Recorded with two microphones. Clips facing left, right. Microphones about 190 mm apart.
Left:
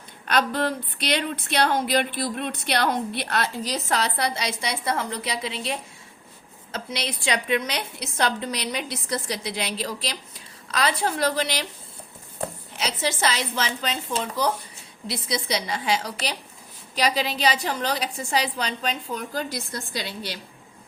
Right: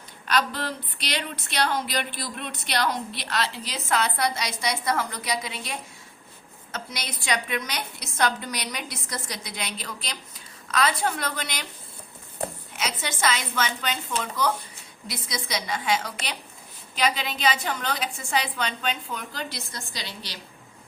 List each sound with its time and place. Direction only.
0.3 s a woman's voice: 55° left (ahead or behind); by 11.6 s 35° left (ahead or behind)
12.7 s a woman's voice: 30° left (ahead or behind); by 20.4 s 50° left (ahead or behind)